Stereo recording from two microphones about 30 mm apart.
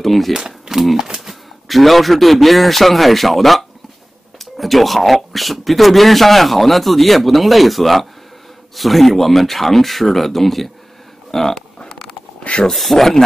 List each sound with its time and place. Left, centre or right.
0.0 s speech: centre
0.5 s typewriter: centre
1.7 s speech: centre
11.3 s a sound: centre
12.7 s speech: centre